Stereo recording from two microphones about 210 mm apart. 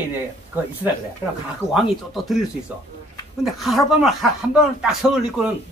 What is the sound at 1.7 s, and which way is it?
Speech, centre (ahead or behind).